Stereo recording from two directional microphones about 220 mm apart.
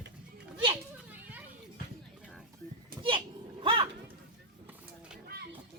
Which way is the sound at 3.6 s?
25° right (ahead or behind).